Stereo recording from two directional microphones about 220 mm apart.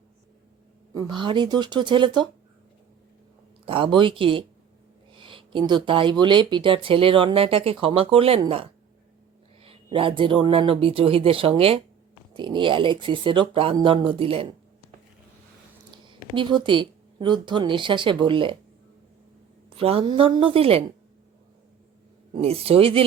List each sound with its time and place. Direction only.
0.9 s speech: 20° right (ahead or behind)
3.7 s speech: 25° right (ahead or behind)
15.9 s speech: 20° right (ahead or behind)
19.7 s speech: 25° right (ahead or behind)
22.4 s speech: 25° right (ahead or behind)